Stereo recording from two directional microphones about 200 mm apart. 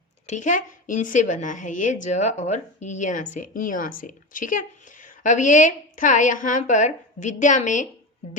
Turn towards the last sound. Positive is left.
turn(degrees=40)  # may be behind; listen again after turning